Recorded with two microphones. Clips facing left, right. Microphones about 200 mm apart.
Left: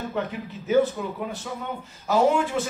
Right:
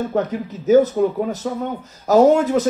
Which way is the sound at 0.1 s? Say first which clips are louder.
Right 8 dB; 40° right (ahead or behind).